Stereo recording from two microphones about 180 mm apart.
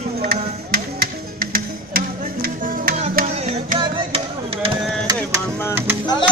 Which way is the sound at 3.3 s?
40° right (ahead or behind).